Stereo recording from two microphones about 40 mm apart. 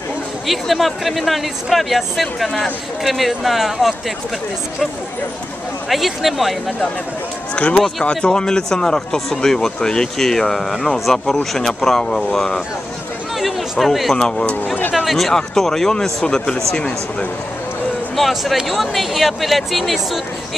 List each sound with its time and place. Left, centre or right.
0.5 s speech: centre
2.4 s speech: centre
3.0 s speech: centre
5.9 s speech: centre
7.6 s speech: left; by 12.6 s centre
13.4 s a sound: centre
14.1 s speech: left
15.0 s speech: centre; by 16.9 s left
18.1 s speech: centre